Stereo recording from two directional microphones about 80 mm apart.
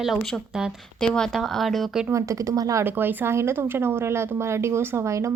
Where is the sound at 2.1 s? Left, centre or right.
Right.